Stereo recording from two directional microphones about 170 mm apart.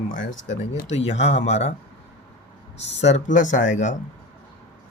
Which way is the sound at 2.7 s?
90° left.